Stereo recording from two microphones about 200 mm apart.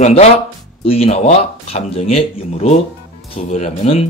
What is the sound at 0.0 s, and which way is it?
Speech, 35° left (ahead or behind).